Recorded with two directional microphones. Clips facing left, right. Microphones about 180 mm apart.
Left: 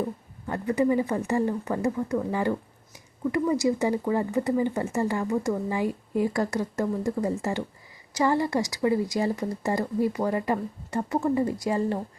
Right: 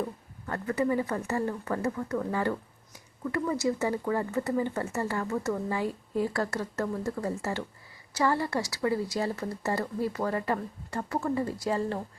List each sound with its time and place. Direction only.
0.0 s speech: 15° left (ahead or behind)